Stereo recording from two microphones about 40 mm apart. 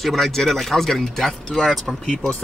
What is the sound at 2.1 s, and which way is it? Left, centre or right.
Speech, centre.